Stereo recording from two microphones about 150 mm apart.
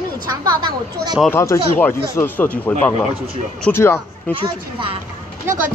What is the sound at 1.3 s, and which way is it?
Speech, 20° left (ahead or behind).